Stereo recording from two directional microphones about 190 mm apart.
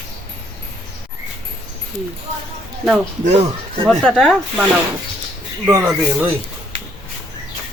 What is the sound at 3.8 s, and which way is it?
Speech, centre (ahead or behind).